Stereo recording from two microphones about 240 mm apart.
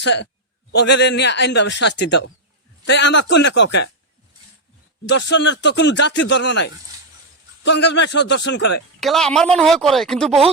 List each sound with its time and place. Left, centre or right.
0.0 s a man's voice: left
5.0 s a man's voice: left
9.0 s speech: centre